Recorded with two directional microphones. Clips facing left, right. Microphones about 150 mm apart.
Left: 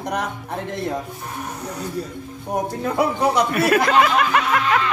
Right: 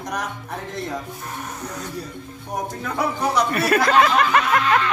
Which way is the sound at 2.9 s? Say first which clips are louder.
Left 4 dB; 25° left (ahead or behind).